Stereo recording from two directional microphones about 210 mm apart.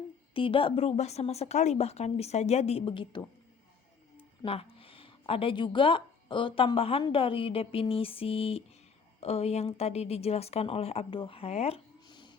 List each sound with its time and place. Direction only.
0.3 s speech: 25° left (ahead or behind)
4.4 s speech: 25° left (ahead or behind)